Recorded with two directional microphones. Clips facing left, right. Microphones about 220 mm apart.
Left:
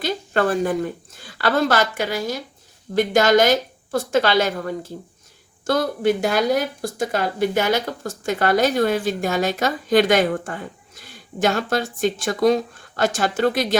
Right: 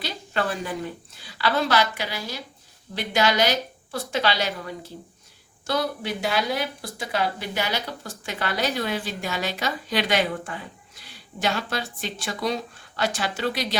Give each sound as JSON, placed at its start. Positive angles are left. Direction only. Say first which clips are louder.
{"t": 0.0, "sound": "speech", "louder": "left 7 dB", "side_deg": 50}